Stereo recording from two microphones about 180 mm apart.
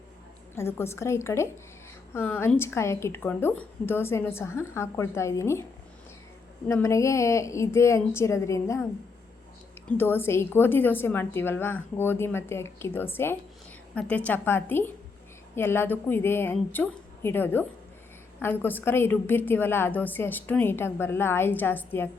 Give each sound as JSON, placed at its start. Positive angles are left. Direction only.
{"t": 0.5, "sound": "a woman's voice", "side_deg": 15}
{"t": 6.7, "sound": "a woman's voice", "side_deg": 15}
{"t": 9.8, "sound": "a woman's voice", "side_deg": 10}